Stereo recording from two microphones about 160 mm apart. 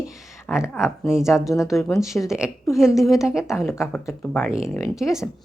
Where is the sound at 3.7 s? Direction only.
15° left (ahead or behind).